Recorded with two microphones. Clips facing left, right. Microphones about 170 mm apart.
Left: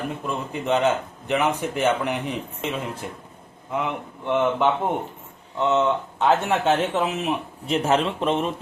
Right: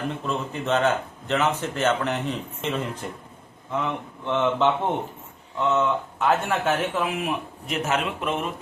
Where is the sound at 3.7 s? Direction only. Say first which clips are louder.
Left 1 dB; 15° left (ahead or behind).